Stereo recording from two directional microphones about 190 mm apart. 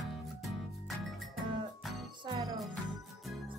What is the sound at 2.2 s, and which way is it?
Music, 20° right (ahead or behind).